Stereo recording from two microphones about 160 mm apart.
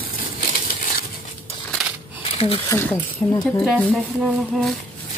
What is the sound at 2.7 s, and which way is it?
Speech, 15° left (ahead or behind).